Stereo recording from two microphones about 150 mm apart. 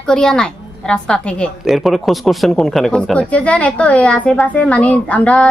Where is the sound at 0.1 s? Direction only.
5° left (ahead or behind).